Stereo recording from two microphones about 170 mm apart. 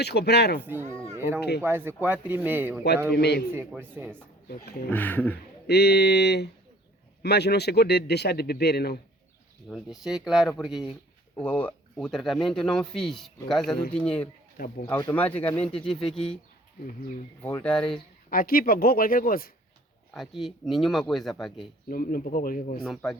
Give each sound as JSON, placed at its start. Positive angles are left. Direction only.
{"t": 0.0, "sound": "a man's voice", "side_deg": 75}
{"t": 0.6, "sound": "speech", "side_deg": -10}
{"t": 3.1, "sound": "a man's voice", "side_deg": 80}
{"t": 3.7, "sound": "speech", "side_deg": -10}
{"t": 4.4, "sound": "speech", "side_deg": 65}
{"t": 4.9, "sound": "speech", "side_deg": 10}
{"t": 5.6, "sound": "a man's voice", "side_deg": 75}
{"t": 9.6, "sound": "speech", "side_deg": 0}
{"t": 11.4, "sound": "speech", "side_deg": 10}
{"t": 17.4, "sound": "speech", "side_deg": 10}
{"t": 18.3, "sound": "speech", "side_deg": 55}
{"t": 20.1, "sound": "speech", "side_deg": 0}
{"t": 21.8, "sound": "speech", "side_deg": 55}
{"t": 22.8, "sound": "speech", "side_deg": 0}